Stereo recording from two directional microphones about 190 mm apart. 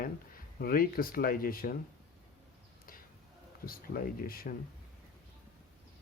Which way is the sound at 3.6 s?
50° left (ahead or behind).